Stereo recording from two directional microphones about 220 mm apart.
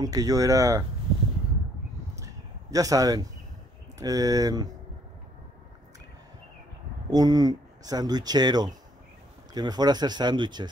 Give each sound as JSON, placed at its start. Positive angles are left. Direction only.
{"t": 0.0, "sound": "speech", "side_deg": -15}
{"t": 2.1, "sound": "a sound", "side_deg": -15}
{"t": 4.0, "sound": "speech", "side_deg": -15}
{"t": 7.1, "sound": "speech", "side_deg": -15}